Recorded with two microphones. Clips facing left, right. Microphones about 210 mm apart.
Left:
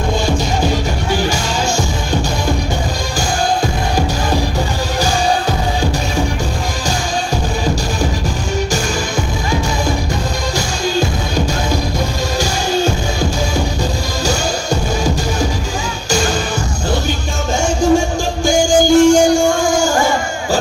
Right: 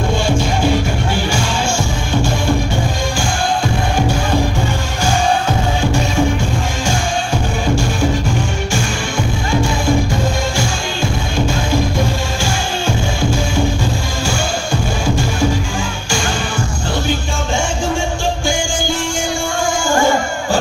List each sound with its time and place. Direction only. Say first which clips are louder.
18.5 s music: left 9 dB; 40° left (ahead or behind)